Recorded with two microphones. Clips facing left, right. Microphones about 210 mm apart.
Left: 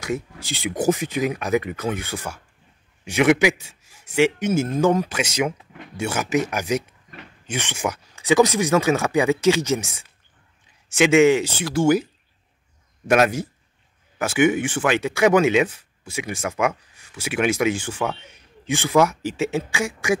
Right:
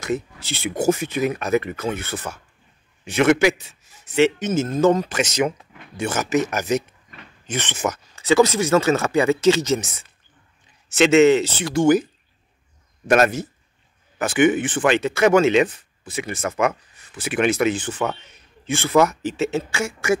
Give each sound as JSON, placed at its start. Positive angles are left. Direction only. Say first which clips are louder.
{"t": 0.0, "sound": "speech", "louder": "right 2 dB", "side_deg": 10}